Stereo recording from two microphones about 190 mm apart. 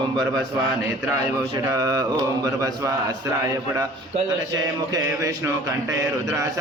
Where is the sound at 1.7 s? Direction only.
20° right (ahead or behind).